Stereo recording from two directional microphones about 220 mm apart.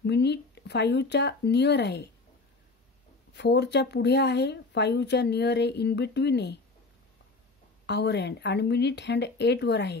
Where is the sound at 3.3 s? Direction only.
50° left (ahead or behind).